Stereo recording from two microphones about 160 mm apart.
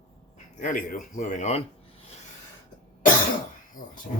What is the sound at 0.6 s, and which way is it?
Speech, 55° left (ahead or behind).